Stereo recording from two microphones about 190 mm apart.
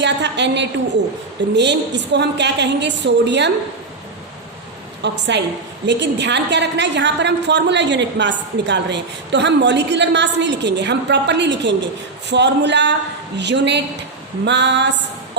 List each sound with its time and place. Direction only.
0.0 s a woman's voice: 65° right (ahead or behind)
5.0 s a woman's voice: 65° right (ahead or behind)